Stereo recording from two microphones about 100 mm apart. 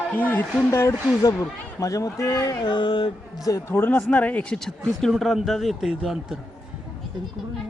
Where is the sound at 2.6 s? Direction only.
50° left (ahead or behind).